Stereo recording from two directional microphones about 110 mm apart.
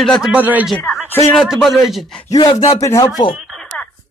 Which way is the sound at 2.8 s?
30° left (ahead or behind).